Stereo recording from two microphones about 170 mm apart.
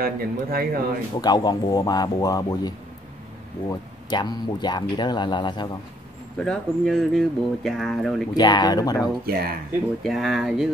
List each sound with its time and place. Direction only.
0.0 s a man's voice: 65° right (ahead or behind)
1.2 s speech: 25° left (ahead or behind)
6.3 s speech: 5° left (ahead or behind)
8.4 s speech: 25° left (ahead or behind)
9.2 s a man's voice: 65° right (ahead or behind)
10.0 s speech: centre (ahead or behind)